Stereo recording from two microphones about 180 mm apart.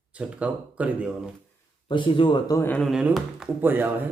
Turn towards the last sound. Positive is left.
turn(degrees=-10)  # may be behind; listen again after turning